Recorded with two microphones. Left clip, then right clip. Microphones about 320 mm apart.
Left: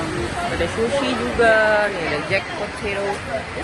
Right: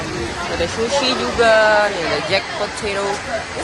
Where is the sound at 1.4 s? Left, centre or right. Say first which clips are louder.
Right 3 dB; centre.